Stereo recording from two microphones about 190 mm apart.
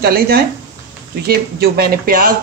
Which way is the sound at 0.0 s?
55° right (ahead or behind).